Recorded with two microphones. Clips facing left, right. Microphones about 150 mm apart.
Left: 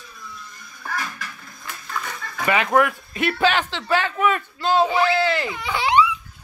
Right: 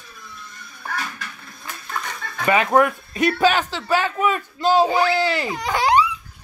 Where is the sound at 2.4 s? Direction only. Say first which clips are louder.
Right 2 dB; 30° right (ahead or behind).